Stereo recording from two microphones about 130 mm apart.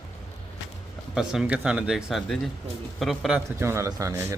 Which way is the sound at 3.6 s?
20° right (ahead or behind).